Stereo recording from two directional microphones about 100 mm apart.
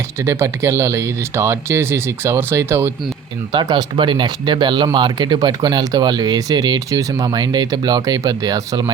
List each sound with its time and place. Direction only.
0.2 s speech: 30° right (ahead or behind)
3.5 s speech: 50° right (ahead or behind)